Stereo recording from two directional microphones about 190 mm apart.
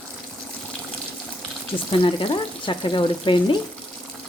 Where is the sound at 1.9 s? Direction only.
25° left (ahead or behind).